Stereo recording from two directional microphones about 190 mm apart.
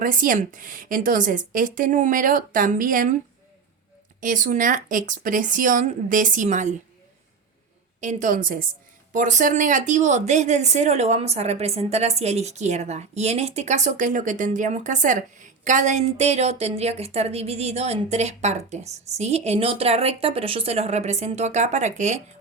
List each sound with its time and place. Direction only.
0.0 s speech: 45° right (ahead or behind)
4.2 s speech: 45° right (ahead or behind)
8.0 s speech: 45° right (ahead or behind)